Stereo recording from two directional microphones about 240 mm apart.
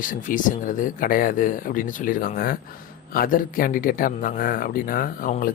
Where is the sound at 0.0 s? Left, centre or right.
Left.